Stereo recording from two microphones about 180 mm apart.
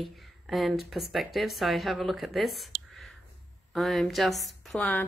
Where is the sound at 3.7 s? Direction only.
Centre (ahead or behind).